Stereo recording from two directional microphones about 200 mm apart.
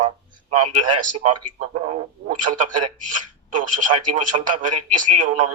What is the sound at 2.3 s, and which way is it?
Speech, 40° right (ahead or behind).